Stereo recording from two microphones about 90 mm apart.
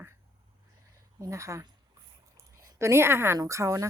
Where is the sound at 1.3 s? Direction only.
35° right (ahead or behind).